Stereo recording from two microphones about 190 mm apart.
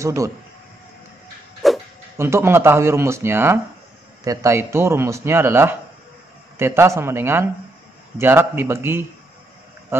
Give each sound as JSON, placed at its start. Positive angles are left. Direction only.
{"t": 0.0, "sound": "a man's voice", "side_deg": -15}
{"t": 1.6, "sound": "a sound", "side_deg": 0}
{"t": 2.1, "sound": "a man's voice", "side_deg": -15}